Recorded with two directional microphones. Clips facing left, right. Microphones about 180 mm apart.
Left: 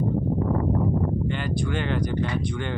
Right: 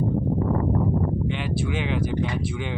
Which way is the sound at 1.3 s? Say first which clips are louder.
Even; 5° right (ahead or behind).